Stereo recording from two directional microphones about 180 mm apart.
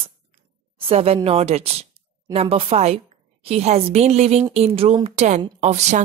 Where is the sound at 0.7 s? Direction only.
35° right (ahead or behind).